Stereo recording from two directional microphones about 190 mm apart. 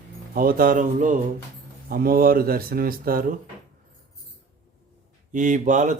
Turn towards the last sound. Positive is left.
turn(degrees=-40)  # may be behind; listen again after turning